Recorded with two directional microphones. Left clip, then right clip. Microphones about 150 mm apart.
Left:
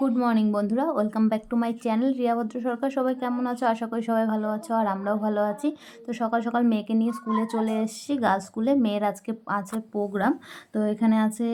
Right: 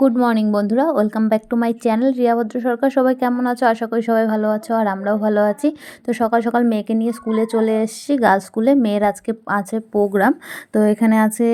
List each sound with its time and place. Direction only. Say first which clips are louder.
0.0 s a woman's voice: right 8 dB; 40° right (ahead or behind)
10.0 s speech: right 10 dB; 45° right (ahead or behind)